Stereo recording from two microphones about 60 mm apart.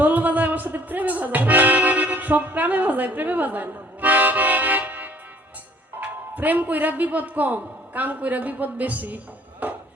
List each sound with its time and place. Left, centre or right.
0.0 s accordion: right
6.0 s a man's voice: right